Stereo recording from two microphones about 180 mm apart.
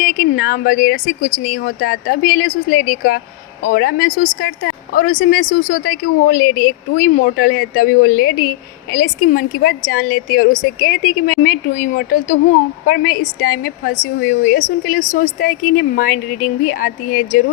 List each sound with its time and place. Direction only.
0.0 s speech: 50° left (ahead or behind)